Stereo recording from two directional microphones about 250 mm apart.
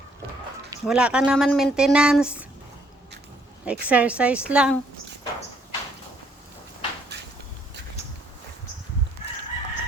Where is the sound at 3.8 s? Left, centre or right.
Centre.